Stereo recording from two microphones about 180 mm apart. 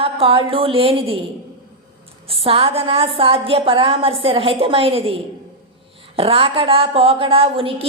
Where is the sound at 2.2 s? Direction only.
30° right (ahead or behind).